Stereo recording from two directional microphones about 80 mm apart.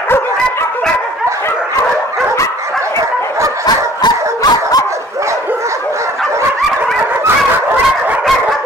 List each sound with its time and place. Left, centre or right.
3.6 s dog: left